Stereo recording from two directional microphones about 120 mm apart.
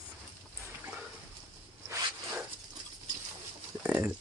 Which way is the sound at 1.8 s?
20° right (ahead or behind).